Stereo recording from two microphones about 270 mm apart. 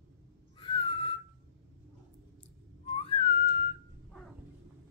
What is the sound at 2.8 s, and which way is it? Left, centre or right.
Whistling, left.